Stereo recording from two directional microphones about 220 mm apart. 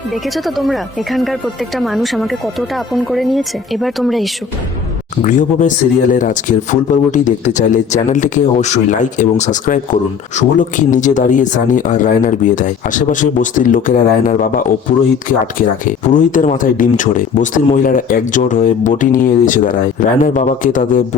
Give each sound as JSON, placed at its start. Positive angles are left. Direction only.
{"t": 0.1, "sound": "speech", "side_deg": 0}
{"t": 5.2, "sound": "speech", "side_deg": 35}